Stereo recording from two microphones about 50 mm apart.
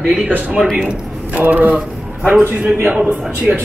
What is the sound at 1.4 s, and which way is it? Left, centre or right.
Speech, right.